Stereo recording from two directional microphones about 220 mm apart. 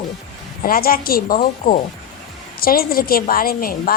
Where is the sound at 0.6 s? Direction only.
40° left (ahead or behind).